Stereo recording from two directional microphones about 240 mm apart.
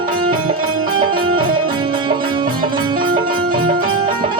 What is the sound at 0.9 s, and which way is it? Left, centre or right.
Music, right.